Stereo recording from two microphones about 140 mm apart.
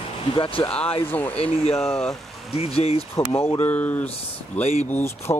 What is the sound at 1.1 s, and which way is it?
Speech, 15° left (ahead or behind).